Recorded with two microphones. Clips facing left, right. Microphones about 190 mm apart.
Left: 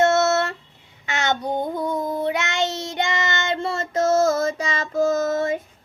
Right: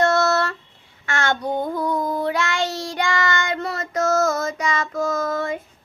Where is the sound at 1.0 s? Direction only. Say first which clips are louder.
Right 1 dB; 20° left (ahead or behind).